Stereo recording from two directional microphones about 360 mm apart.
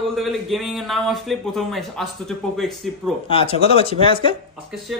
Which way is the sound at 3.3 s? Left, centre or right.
Centre.